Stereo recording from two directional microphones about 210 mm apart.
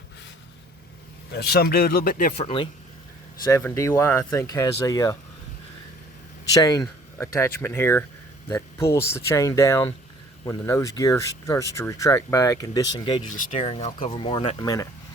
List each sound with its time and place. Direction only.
1.3 s speech: 50° left (ahead or behind)
3.4 s speech: 15° left (ahead or behind)
6.5 s speech: 15° left (ahead or behind)
13.2 s speech: 30° left (ahead or behind)